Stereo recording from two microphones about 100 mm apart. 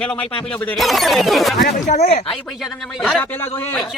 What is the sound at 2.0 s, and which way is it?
Speech, 90° left.